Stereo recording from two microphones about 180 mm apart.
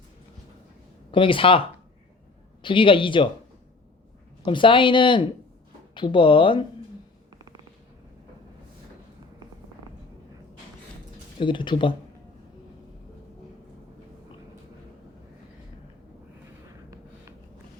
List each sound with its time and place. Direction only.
1.1 s speech: 30° left (ahead or behind)
4.4 s speech: 25° left (ahead or behind)
7.3 s a sound: 20° right (ahead or behind)
11.3 s speech: 25° left (ahead or behind)